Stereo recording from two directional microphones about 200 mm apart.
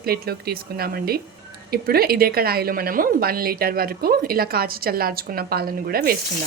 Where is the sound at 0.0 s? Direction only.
50° right (ahead or behind).